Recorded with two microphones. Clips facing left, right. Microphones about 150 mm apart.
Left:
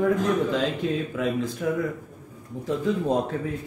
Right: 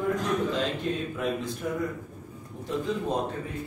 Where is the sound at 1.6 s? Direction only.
90° left.